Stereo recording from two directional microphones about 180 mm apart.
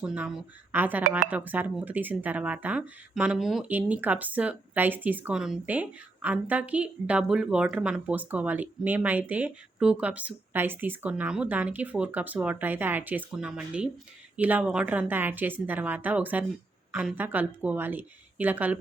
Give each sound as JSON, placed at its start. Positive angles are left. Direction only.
{"t": 0.0, "sound": "speech", "side_deg": -5}